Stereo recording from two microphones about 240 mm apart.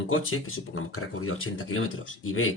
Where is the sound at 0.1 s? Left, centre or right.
Left.